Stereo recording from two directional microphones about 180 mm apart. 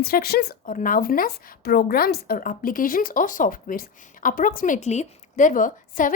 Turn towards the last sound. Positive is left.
turn(degrees=45)  # may be behind; listen again after turning